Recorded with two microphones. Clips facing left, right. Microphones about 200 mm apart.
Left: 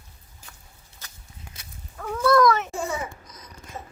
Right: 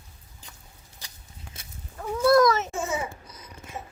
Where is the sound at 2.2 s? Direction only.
30° right (ahead or behind).